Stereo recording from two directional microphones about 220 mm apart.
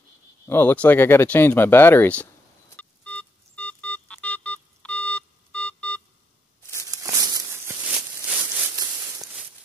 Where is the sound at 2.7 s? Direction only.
5° left (ahead or behind).